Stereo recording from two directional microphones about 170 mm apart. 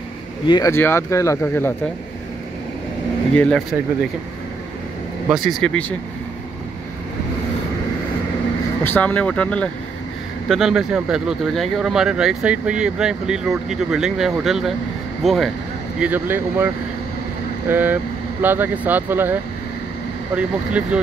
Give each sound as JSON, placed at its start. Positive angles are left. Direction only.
{"t": 0.5, "sound": "speech", "side_deg": 20}
{"t": 3.3, "sound": "speech", "side_deg": 5}
{"t": 5.3, "sound": "speech", "side_deg": 0}
{"t": 8.8, "sound": "speech", "side_deg": 10}
{"t": 16.0, "sound": "speech", "side_deg": -10}